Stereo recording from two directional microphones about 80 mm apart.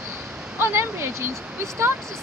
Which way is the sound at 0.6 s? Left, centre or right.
Right.